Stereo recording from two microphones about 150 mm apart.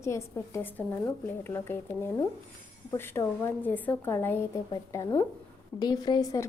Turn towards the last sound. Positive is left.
turn(degrees=25)  # may be behind; listen again after turning